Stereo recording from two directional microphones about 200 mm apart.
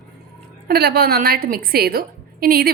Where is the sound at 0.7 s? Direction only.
50° right (ahead or behind).